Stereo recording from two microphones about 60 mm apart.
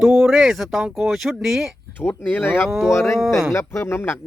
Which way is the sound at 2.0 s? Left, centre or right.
Left.